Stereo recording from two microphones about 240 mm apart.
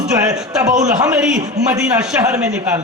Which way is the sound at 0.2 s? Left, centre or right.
Centre.